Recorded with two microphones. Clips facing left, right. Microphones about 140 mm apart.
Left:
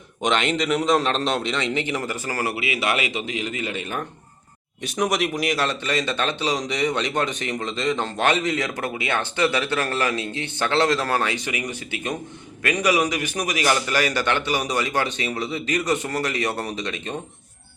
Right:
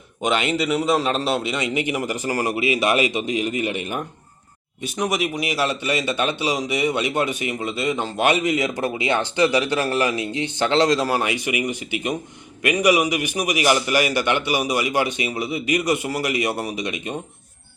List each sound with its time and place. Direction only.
0.2 s a man's voice: 5° right (ahead or behind)
4.8 s a man's voice: centre (ahead or behind)